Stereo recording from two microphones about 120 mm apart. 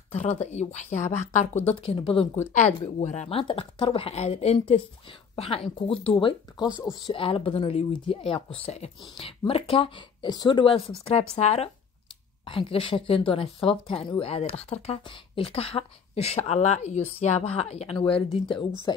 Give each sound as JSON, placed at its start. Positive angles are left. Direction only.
{"t": 0.1, "sound": "a woman's voice", "side_deg": 65}
{"t": 1.8, "sound": "speech", "side_deg": 50}
{"t": 3.0, "sound": "speech", "side_deg": 70}
{"t": 12.4, "sound": "speech", "side_deg": 50}
{"t": 14.2, "sound": "speech", "side_deg": 55}
{"t": 15.0, "sound": "speech", "side_deg": 50}
{"t": 17.2, "sound": "speech", "side_deg": 60}
{"t": 18.0, "sound": "speech", "side_deg": 50}